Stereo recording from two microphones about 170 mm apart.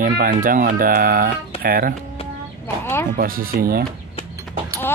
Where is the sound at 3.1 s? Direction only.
60° right (ahead or behind).